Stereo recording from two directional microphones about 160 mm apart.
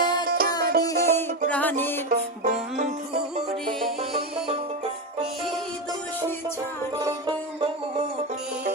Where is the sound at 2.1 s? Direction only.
55° right (ahead or behind).